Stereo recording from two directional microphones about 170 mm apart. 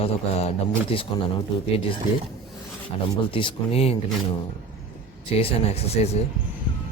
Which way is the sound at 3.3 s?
35° left (ahead or behind).